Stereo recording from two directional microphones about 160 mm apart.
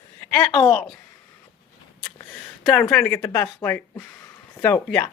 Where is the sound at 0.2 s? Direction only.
10° left (ahead or behind).